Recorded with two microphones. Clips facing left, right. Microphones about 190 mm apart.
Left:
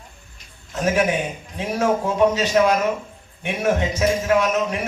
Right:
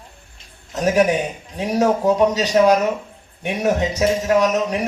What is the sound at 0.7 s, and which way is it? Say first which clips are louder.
Speech: right 3 dB; 40° right (ahead or behind).